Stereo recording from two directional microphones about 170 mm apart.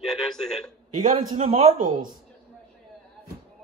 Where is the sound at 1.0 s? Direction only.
50° right (ahead or behind).